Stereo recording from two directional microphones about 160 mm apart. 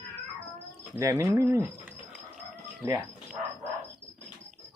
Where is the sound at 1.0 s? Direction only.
15° right (ahead or behind).